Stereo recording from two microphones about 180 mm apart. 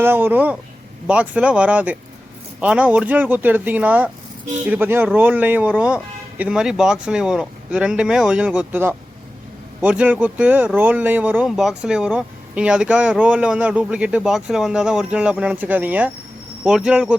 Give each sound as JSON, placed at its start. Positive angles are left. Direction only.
{"t": 0.0, "sound": "speech", "side_deg": -10}